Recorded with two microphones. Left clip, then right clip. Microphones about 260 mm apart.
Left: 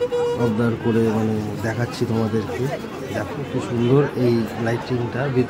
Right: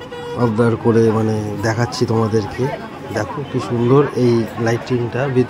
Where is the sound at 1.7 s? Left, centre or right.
Centre.